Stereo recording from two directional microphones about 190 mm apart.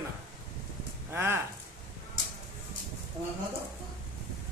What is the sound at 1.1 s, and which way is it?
Speech, 10° right (ahead or behind).